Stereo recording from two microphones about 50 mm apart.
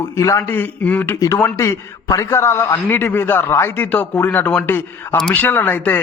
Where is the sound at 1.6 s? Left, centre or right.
Left.